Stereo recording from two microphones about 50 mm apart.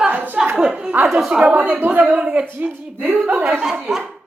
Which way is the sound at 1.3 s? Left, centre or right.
Centre.